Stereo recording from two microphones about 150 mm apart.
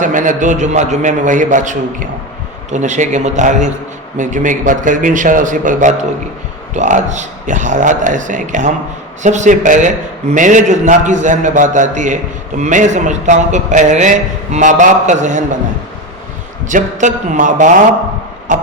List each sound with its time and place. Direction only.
0.0 s a man's voice: 60° right (ahead or behind)
16.6 s a man's voice: 55° right (ahead or behind)